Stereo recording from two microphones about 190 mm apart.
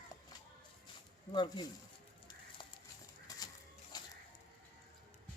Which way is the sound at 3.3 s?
20° left (ahead or behind).